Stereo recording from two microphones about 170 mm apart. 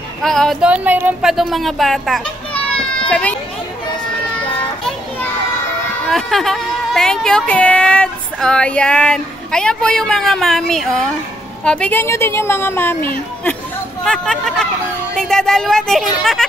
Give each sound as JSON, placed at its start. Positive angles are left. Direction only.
{"t": 0.2, "sound": "a child's voice", "side_deg": 0}
{"t": 6.0, "sound": "a woman's voice", "side_deg": 0}